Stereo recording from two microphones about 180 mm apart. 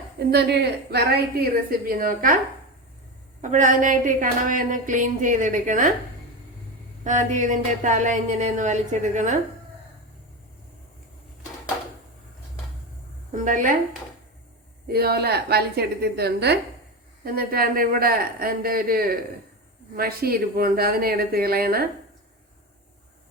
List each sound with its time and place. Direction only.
0.2 s a woman's voice: 65° right (ahead or behind); by 2.4 s 50° right (ahead or behind)
3.4 s speech: 45° right (ahead or behind)
7.0 s speech: 45° right (ahead or behind)
13.3 s speech: 45° right (ahead or behind)
14.8 s a woman's voice: 60° right (ahead or behind)